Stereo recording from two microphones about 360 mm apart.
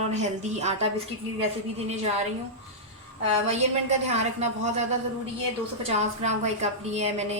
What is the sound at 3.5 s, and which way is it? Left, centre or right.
Speech, centre.